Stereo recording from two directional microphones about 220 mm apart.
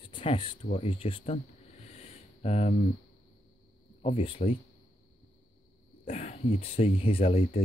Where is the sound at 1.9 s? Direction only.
30° left (ahead or behind).